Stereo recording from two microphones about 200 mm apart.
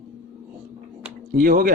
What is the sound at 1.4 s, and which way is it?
Speech, 45° right (ahead or behind).